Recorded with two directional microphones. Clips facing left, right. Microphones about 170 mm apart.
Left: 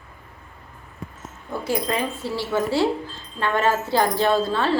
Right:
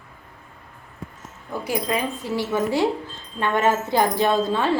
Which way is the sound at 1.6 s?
15° right (ahead or behind).